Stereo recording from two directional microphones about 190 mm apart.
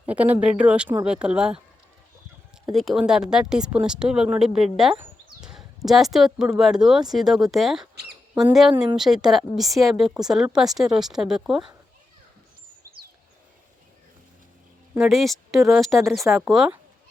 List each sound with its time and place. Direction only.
0.0 s speech: 10° right (ahead or behind)
2.7 s speech: centre (ahead or behind)
14.9 s speech: centre (ahead or behind)